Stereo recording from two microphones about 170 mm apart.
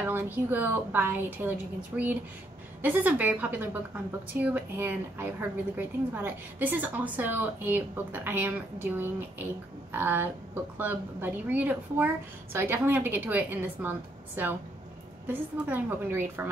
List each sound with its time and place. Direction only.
0.0 s a woman's voice: 10° right (ahead or behind)